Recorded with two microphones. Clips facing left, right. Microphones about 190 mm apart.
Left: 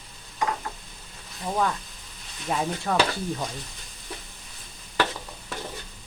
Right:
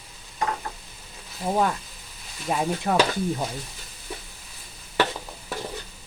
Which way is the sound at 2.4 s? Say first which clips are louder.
Right 2 dB; 10° right (ahead or behind).